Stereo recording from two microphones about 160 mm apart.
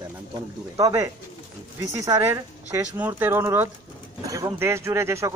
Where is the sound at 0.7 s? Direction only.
20° right (ahead or behind).